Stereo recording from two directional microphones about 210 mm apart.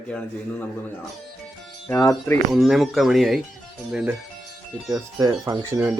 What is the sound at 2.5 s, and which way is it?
Speech, centre (ahead or behind).